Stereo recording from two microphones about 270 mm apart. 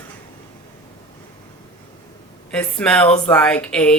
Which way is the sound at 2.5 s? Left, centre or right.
Centre.